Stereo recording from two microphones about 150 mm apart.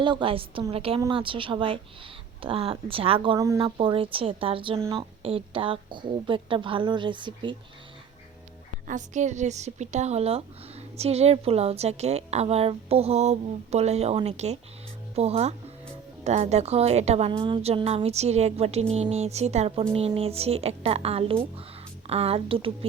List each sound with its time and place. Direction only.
0.0 s a woman's voice: 35° right (ahead or behind)
3.3 s speech: 20° right (ahead or behind)
3.6 s a woman's voice: 35° right (ahead or behind)
8.9 s speech: 55° right (ahead or behind)
17.3 s a woman's voice: 35° right (ahead or behind)